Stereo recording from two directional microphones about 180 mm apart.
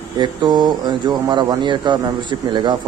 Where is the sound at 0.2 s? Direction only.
25° right (ahead or behind).